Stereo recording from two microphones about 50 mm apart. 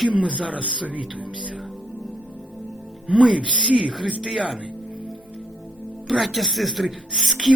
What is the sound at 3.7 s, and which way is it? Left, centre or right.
Speech, right.